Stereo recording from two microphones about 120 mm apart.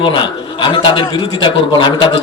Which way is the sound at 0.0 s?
45° left (ahead or behind).